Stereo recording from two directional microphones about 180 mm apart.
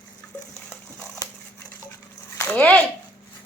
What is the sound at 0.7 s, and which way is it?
Crumpling, 20° left (ahead or behind).